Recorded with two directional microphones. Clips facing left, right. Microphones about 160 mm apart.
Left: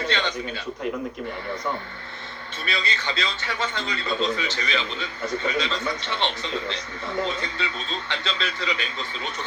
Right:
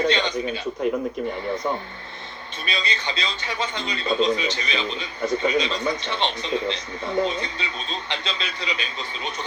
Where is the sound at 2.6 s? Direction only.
20° right (ahead or behind).